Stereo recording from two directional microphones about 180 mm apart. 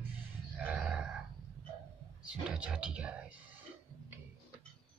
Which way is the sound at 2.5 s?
5° right (ahead or behind).